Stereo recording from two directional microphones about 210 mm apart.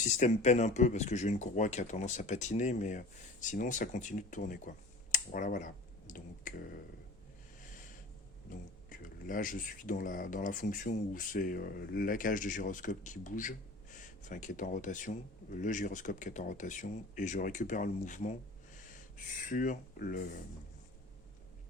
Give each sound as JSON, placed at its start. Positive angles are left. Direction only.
{"t": 0.0, "sound": "speech", "side_deg": 35}
{"t": 8.4, "sound": "speech", "side_deg": 40}